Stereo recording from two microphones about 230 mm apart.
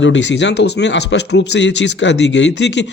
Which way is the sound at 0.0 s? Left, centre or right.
Left.